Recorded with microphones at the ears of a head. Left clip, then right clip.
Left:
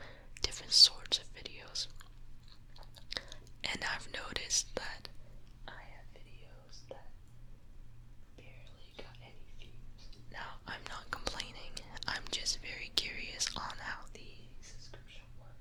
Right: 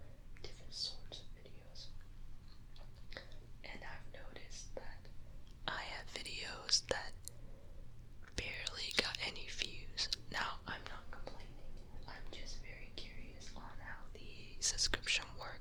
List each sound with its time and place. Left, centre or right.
0.0 s whispering: left
5.6 s whispering: right
8.4 s whispering: right
10.9 s whispering: left
14.4 s whispering: right